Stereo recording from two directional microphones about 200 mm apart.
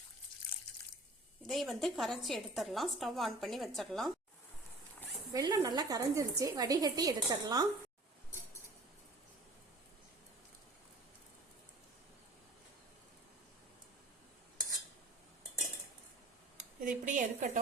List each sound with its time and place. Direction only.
1.5 s a woman's voice: centre (ahead or behind)
5.3 s speech: 20° right (ahead or behind)
16.8 s a woman's voice: 40° right (ahead or behind)